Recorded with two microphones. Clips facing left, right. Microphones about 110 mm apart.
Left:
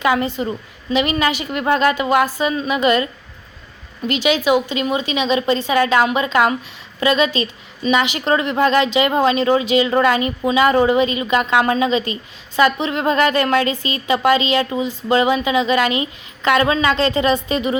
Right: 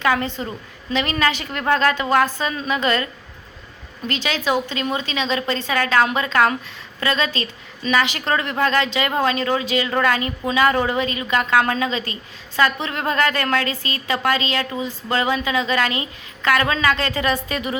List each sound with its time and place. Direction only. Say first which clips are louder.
0.0 s a woman's voice: left 3 dB; 15° left (ahead or behind)